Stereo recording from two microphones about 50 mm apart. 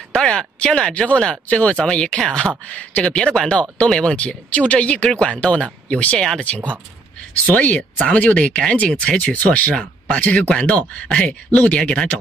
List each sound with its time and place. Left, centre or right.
0.1 s speech: centre
2.7 s speech: left
3.2 s speech: centre
4.2 s speech: left
6.1 s speech: centre
7.4 s speech: left
9.0 s speech: centre
9.3 s speech: left
11.5 s speech: left
11.8 s speech: centre